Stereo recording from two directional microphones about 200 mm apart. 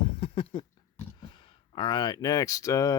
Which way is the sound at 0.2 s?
30° left (ahead or behind).